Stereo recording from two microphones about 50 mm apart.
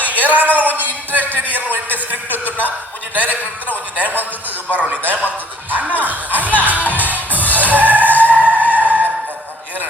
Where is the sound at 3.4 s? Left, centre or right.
Left.